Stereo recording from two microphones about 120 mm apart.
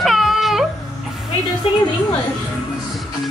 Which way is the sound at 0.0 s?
Centre (ahead or behind).